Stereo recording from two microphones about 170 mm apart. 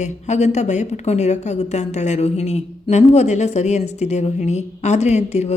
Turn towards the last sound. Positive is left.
turn(degrees=40)  # may be behind; listen again after turning